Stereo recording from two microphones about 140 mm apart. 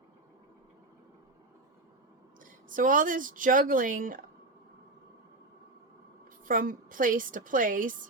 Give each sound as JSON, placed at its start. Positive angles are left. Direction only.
{"t": 2.4, "sound": "speech", "side_deg": -70}
{"t": 6.4, "sound": "speech", "side_deg": -75}